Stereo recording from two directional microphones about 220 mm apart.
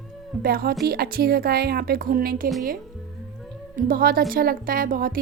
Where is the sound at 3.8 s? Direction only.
40° right (ahead or behind).